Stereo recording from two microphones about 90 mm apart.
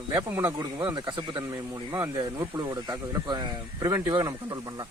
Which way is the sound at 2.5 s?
45° right (ahead or behind).